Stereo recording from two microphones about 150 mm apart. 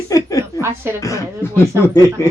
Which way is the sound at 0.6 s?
15° right (ahead or behind).